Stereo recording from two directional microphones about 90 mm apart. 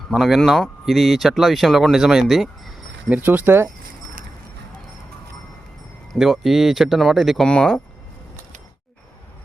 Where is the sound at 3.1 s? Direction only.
20° right (ahead or behind).